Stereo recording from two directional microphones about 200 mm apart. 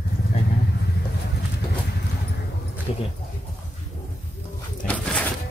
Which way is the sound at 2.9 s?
30° left (ahead or behind).